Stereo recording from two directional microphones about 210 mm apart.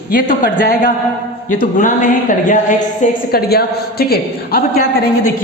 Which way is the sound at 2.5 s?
40° left (ahead or behind).